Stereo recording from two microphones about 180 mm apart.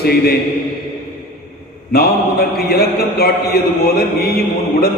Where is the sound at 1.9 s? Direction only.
60° left (ahead or behind).